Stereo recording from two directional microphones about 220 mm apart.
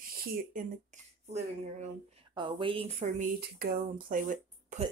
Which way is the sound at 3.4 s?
45° right (ahead or behind).